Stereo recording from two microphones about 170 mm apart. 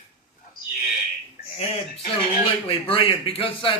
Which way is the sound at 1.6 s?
35° left (ahead or behind).